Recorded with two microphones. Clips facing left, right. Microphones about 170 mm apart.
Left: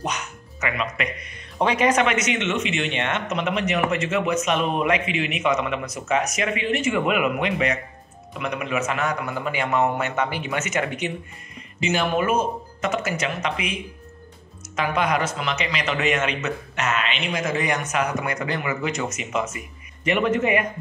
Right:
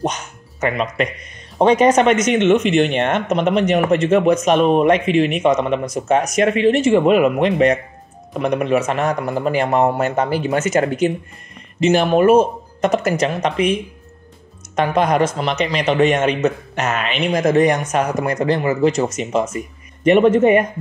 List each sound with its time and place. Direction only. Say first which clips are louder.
0.6 s a man's voice: right 7 dB; 35° right (ahead or behind)
3.3 s a man's voice: right 7 dB; 35° right (ahead or behind)
5.9 s speech: right 7 dB; 45° right (ahead or behind)
6.6 s a man's voice: right 9 dB; 35° right (ahead or behind)
11.8 s speech: right 8 dB; 50° right (ahead or behind)
12.9 s a man's voice: right 8 dB; 40° right (ahead or behind)
14.8 s a man's voice: right 7 dB; 40° right (ahead or behind)
20.1 s speech: right 9 dB; 45° right (ahead or behind)